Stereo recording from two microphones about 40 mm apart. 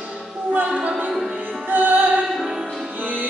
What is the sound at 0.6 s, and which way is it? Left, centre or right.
Music, right.